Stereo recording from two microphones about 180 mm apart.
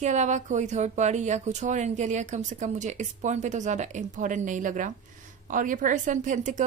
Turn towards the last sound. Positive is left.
turn(degrees=-45)  # may be behind; listen again after turning